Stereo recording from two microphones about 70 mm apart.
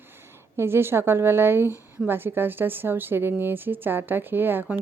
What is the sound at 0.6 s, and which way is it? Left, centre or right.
A woman's voice, right.